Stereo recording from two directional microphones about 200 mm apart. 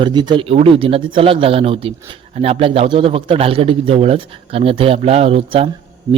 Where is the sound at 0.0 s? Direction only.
20° right (ahead or behind).